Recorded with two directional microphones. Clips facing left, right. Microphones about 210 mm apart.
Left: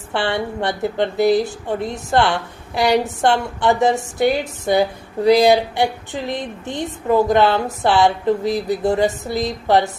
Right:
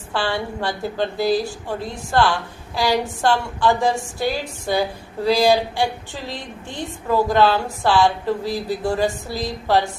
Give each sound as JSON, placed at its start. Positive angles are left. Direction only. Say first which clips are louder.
{"t": 0.1, "sound": "a woman's voice", "louder": "left 3 dB", "side_deg": 20}